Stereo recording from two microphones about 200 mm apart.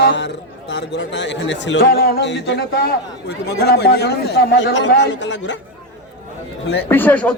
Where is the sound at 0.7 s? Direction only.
60° left (ahead or behind).